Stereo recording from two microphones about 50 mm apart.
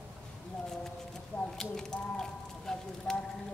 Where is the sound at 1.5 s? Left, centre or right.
Centre.